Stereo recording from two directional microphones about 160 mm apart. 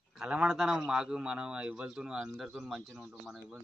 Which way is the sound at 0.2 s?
5° right (ahead or behind).